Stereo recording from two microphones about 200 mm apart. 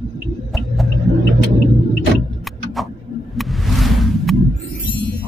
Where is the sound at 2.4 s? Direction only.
Centre (ahead or behind).